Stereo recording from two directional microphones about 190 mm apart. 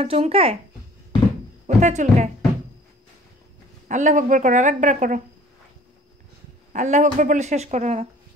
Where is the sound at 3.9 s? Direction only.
40° right (ahead or behind).